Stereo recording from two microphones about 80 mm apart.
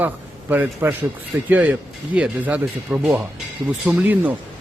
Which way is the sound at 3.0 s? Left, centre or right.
Centre.